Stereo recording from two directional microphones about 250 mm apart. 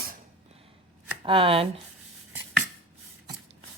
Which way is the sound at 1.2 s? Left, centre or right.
Right.